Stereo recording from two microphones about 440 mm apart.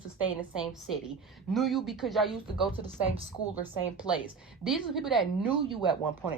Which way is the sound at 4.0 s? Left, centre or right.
Centre.